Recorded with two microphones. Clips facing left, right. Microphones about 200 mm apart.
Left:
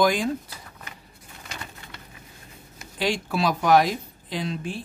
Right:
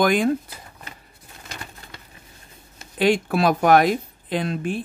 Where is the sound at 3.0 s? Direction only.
55° right (ahead or behind).